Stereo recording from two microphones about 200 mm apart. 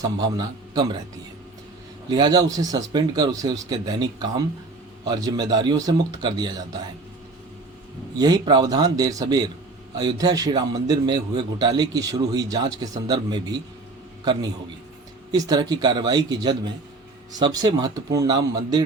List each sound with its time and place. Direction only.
0.0 s a man's voice: 20° right (ahead or behind)
2.0 s a man's voice: 20° right (ahead or behind)
8.2 s a man's voice: 20° right (ahead or behind)
15.3 s a man's voice: 20° right (ahead or behind)